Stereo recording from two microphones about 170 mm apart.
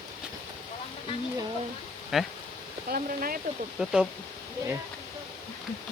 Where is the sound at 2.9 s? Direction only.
60° right (ahead or behind).